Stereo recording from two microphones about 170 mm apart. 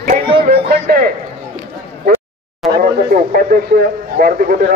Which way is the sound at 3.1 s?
55° right (ahead or behind).